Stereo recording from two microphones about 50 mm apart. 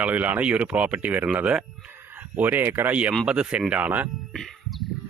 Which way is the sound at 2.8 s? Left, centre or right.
Right.